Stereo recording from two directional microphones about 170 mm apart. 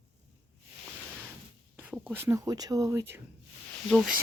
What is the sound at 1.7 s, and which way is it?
Speech, 10° right (ahead or behind).